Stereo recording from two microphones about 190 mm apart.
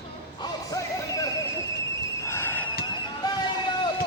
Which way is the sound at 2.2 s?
10° left (ahead or behind).